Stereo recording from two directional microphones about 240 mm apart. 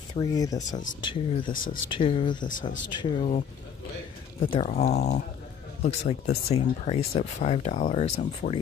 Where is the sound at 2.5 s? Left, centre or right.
Left.